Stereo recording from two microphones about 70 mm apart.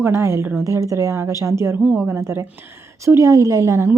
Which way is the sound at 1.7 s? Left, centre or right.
Right.